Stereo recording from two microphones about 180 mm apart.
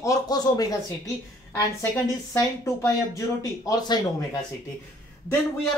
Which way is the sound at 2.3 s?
15° left (ahead or behind).